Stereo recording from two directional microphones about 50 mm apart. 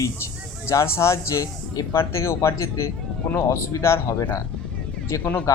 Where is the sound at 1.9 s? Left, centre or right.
Left.